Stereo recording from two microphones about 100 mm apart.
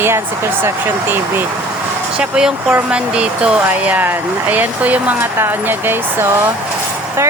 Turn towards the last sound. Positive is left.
turn(degrees=-20)  # may be behind; listen again after turning